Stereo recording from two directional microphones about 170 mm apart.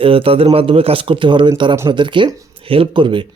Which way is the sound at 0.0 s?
30° right (ahead or behind).